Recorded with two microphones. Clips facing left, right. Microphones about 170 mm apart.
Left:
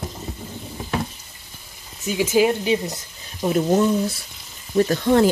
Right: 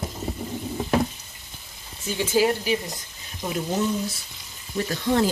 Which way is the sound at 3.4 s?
50° left (ahead or behind).